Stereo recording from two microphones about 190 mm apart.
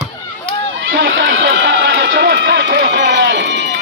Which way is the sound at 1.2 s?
75° right (ahead or behind).